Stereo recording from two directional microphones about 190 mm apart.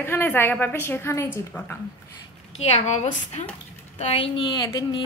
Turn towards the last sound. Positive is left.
turn(degrees=20)  # may be behind; listen again after turning